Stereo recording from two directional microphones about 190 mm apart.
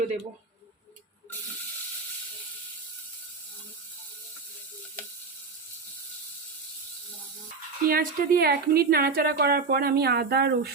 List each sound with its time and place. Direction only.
7.9 s speech: 50° right (ahead or behind)